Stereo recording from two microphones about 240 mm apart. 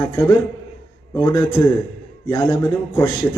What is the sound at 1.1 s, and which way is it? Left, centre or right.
A man's voice, centre.